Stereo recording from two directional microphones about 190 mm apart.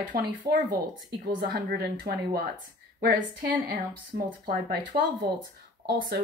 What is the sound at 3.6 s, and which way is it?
Speech, 50° right (ahead or behind).